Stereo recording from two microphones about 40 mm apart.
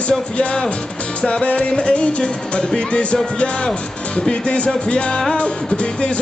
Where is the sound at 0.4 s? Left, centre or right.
Left.